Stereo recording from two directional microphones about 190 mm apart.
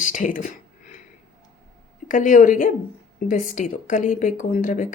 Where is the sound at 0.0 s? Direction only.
40° left (ahead or behind).